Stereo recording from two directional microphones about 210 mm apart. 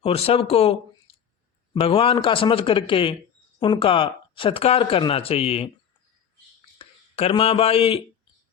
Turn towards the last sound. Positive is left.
turn(degrees=25)  # may be behind; listen again after turning